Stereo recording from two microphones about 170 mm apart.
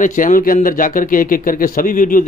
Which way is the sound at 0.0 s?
50° left (ahead or behind).